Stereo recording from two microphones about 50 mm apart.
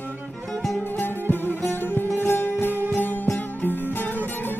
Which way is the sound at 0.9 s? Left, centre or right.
Left.